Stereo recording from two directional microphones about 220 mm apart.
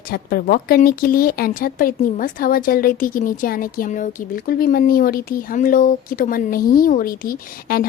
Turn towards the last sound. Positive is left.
turn(degrees=40)  # may be behind; listen again after turning